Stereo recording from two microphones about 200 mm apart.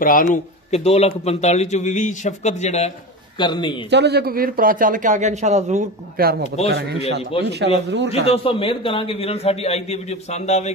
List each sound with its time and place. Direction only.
0.0 s a man's voice: 45° left (ahead or behind)
3.3 s a man's voice: 25° left (ahead or behind)
3.9 s a man's voice: 55° right (ahead or behind)
7.0 s a man's voice: 30° left (ahead or behind)
7.4 s speech: 55° right (ahead or behind)
8.3 s a man's voice: 25° left (ahead or behind)